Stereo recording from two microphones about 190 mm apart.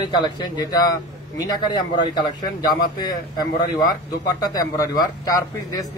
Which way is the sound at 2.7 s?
20° left (ahead or behind).